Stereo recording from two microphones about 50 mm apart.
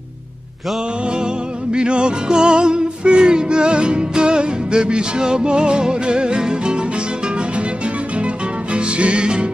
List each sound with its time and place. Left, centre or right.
1.7 s music: centre
8.7 s music: right